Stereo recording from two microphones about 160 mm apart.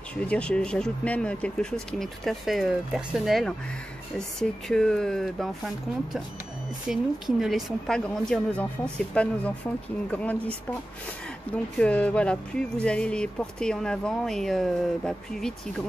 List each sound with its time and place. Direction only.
0.1 s speech: 10° left (ahead or behind)
6.9 s speech: centre (ahead or behind)
11.5 s speech: 10° left (ahead or behind)